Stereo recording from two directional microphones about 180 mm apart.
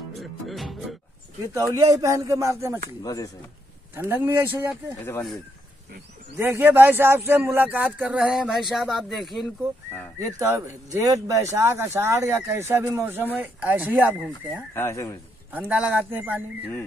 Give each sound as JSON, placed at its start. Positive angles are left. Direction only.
{"t": 0.1, "sound": "music", "side_deg": 0}
{"t": 1.9, "sound": "a man's voice", "side_deg": -20}
{"t": 3.0, "sound": "speech", "side_deg": 20}
{"t": 3.9, "sound": "a man's voice", "side_deg": -10}
{"t": 4.8, "sound": "speech", "side_deg": 15}
{"t": 6.3, "sound": "a man's voice", "side_deg": -15}
{"t": 10.1, "sound": "a man's voice", "side_deg": -15}
{"t": 14.7, "sound": "speech", "side_deg": 15}
{"t": 15.7, "sound": "a man's voice", "side_deg": -10}